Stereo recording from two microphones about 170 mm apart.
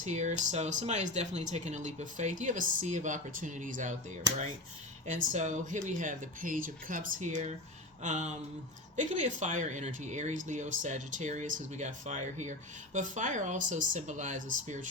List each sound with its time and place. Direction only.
0.0 s speech: 45° right (ahead or behind)
5.0 s speech: 45° right (ahead or behind)